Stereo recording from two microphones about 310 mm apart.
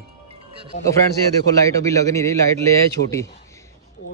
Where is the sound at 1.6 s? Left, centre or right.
Centre.